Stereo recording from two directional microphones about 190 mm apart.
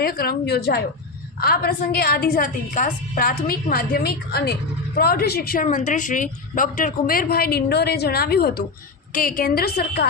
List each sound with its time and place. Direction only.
0.0 s a woman's voice: 50° left (ahead or behind)
5.6 s a woman's voice: 40° left (ahead or behind); by 10.1 s 55° left (ahead or behind)